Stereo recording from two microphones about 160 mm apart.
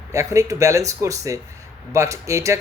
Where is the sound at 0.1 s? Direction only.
20° right (ahead or behind).